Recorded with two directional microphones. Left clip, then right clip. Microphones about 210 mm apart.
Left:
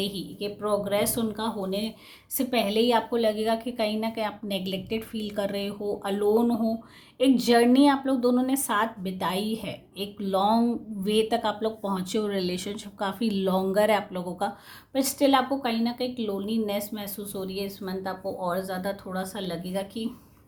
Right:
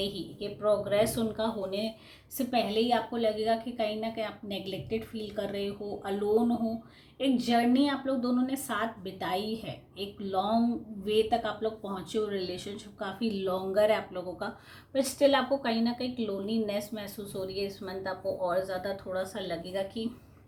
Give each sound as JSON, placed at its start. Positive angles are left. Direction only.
{"t": 0.0, "sound": "a woman's voice", "side_deg": 35}
{"t": 2.4, "sound": "a woman's voice", "side_deg": 45}
{"t": 14.9, "sound": "a woman's voice", "side_deg": 30}